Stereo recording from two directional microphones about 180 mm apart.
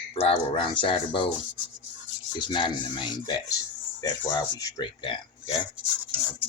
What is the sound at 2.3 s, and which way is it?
Speech, 25° left (ahead or behind).